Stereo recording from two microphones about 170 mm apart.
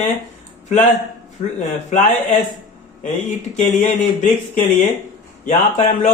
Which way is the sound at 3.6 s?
45° left (ahead or behind).